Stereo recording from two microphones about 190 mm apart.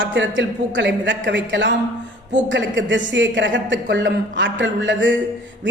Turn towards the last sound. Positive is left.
turn(degrees=-70)  # may be behind; listen again after turning